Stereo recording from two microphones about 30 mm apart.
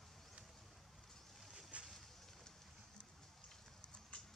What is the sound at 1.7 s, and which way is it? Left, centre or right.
Boat, right.